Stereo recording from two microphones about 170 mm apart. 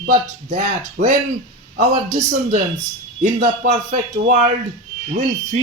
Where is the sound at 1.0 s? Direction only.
45° right (ahead or behind).